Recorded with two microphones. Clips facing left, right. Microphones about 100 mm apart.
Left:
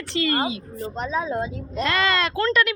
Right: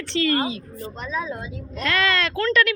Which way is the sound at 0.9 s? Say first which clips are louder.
Left 4 dB; 30° left (ahead or behind).